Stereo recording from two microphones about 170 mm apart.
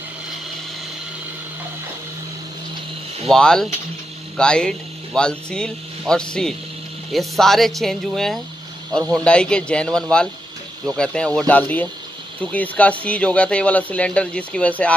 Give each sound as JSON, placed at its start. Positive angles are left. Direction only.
{"t": 3.3, "sound": "speech", "side_deg": 5}